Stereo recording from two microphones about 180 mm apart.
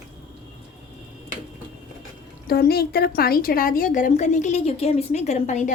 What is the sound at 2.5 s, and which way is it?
A woman's voice, 60° left (ahead or behind).